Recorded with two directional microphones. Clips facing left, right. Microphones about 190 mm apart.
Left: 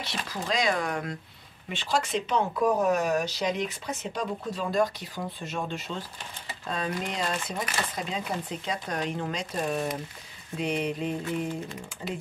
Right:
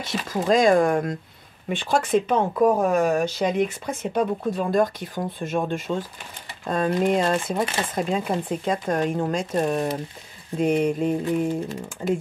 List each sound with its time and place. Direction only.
0.0 s speech: 45° right (ahead or behind)